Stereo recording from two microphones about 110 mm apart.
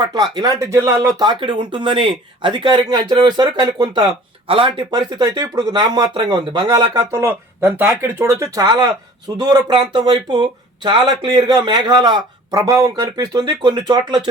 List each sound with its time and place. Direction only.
0.0 s speech: 40° right (ahead or behind)
4.4 s speech: 55° right (ahead or behind)
4.9 s speech: 40° right (ahead or behind)